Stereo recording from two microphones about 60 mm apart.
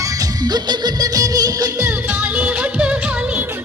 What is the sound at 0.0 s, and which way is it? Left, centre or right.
Music, right.